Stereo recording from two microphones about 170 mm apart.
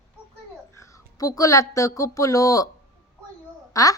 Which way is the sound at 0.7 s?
15° left (ahead or behind).